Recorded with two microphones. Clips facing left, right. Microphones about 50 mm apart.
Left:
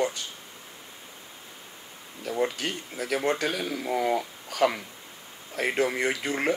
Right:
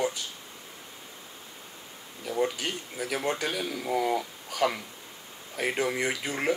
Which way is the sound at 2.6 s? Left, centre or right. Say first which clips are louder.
Left 1 dB; centre.